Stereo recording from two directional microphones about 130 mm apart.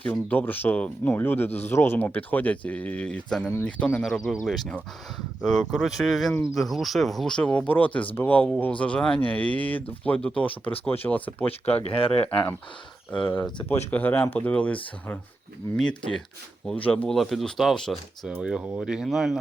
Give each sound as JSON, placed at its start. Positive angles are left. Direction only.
{"t": 0.0, "sound": "speech", "side_deg": 10}
{"t": 10.5, "sound": "speech", "side_deg": 45}
{"t": 11.0, "sound": "speech", "side_deg": 10}
{"t": 11.9, "sound": "speech", "side_deg": 50}
{"t": 13.1, "sound": "speech", "side_deg": 15}